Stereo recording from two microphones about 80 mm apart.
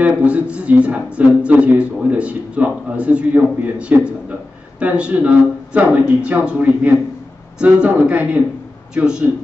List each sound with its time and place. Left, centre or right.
0.0 s speech: centre